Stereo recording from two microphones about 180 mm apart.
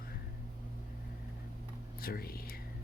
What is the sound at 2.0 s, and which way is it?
Whispering, 55° left (ahead or behind).